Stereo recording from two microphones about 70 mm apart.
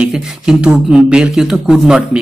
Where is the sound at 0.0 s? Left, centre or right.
Centre.